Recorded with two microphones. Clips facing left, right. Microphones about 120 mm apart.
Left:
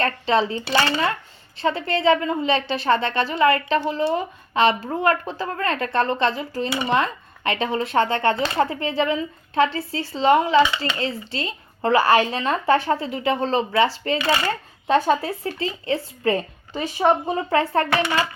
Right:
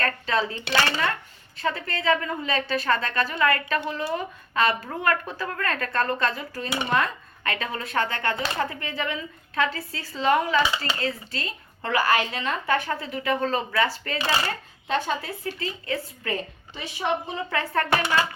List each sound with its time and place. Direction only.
0.0 s a woman's voice: 25° left (ahead or behind)
14.8 s speech: 40° left (ahead or behind)
16.7 s a woman's voice: 50° left (ahead or behind)
17.5 s speech: 30° left (ahead or behind)